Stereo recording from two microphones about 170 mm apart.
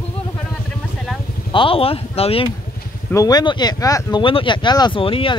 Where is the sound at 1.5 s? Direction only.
30° left (ahead or behind).